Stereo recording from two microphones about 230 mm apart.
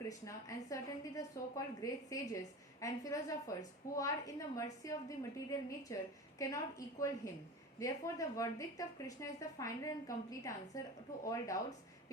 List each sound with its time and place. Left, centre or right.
0.1 s a woman's voice: centre